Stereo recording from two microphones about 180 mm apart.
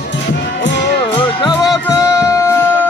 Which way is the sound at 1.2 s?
20° left (ahead or behind).